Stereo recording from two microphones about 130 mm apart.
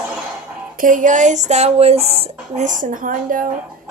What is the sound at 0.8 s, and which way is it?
Speech, 85° right.